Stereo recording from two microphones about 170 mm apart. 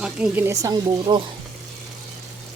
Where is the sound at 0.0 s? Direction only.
10° right (ahead or behind).